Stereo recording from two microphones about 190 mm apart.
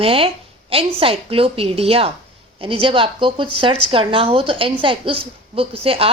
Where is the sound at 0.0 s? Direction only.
30° right (ahead or behind).